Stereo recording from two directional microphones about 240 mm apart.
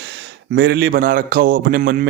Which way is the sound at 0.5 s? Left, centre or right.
Right.